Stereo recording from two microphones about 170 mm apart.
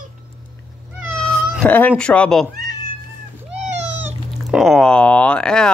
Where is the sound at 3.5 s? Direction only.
45° right (ahead or behind).